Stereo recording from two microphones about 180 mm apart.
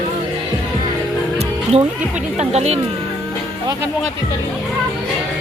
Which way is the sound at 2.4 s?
35° right (ahead or behind).